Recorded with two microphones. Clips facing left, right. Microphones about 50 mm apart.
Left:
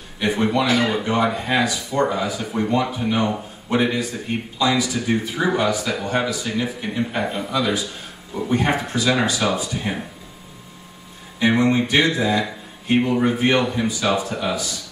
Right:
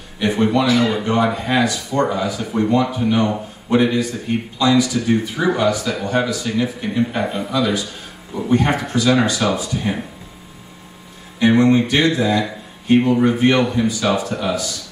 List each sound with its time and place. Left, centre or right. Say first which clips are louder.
0.2 s a man's voice: right 3 dB; centre
11.3 s a sound: right 4 dB; centre
11.9 s a man's voice: right 2 dB; centre